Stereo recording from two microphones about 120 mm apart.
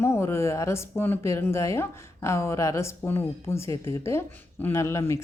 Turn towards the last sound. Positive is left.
turn(degrees=20)  # may be behind; listen again after turning